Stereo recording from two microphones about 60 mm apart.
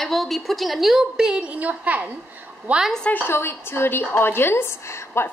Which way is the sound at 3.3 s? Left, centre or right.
Left.